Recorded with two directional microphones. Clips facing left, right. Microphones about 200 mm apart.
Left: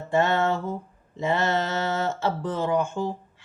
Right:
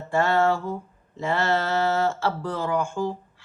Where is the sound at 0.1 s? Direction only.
20° left (ahead or behind).